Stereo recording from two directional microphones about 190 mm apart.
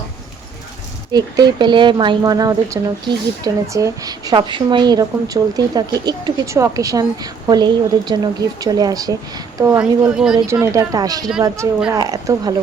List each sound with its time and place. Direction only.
1.1 s a woman's voice: 20° right (ahead or behind); by 10.3 s 5° right (ahead or behind)
10.4 s a woman's voice: 15° right (ahead or behind)